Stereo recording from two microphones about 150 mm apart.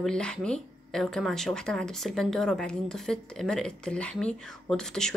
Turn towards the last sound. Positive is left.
turn(degrees=5)  # may be behind; listen again after turning